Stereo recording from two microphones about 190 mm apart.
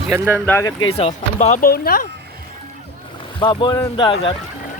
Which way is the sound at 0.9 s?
35° left (ahead or behind).